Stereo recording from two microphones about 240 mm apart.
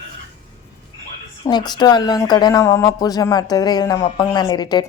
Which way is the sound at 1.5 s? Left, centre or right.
Centre.